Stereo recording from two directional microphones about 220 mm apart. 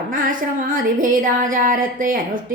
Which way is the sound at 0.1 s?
40° right (ahead or behind).